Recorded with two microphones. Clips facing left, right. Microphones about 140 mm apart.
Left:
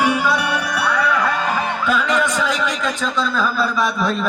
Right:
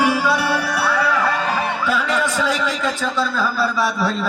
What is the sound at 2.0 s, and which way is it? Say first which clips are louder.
Music: left 1 dB; 20° left (ahead or behind).